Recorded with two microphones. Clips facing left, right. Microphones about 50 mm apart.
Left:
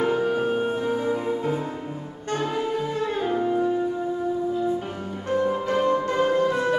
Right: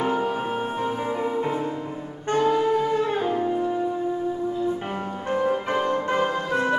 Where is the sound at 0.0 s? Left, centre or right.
Centre.